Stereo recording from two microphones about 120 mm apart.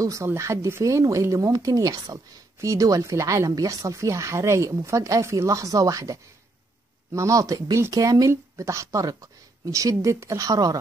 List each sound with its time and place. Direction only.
0.0 s speech: 25° right (ahead or behind)